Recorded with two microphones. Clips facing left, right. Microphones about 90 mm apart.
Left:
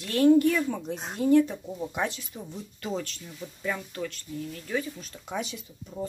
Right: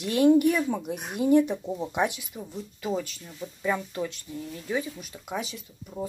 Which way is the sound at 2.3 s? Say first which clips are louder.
Right 2 dB; 5° right (ahead or behind).